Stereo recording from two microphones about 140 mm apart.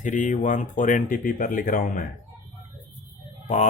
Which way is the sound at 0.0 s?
65° left (ahead or behind).